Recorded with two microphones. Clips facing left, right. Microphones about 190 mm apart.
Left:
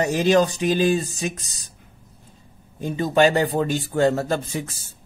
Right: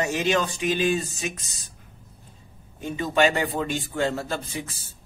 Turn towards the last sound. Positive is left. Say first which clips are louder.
# left 5 dB
turn(degrees=45)  # may be behind; listen again after turning